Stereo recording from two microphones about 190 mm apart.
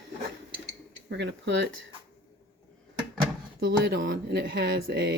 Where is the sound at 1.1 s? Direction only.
65° right (ahead or behind).